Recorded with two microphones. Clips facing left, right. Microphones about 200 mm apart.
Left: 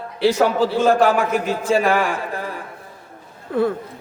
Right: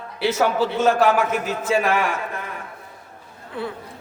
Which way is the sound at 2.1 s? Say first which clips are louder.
Left 3 dB; 35° left (ahead or behind).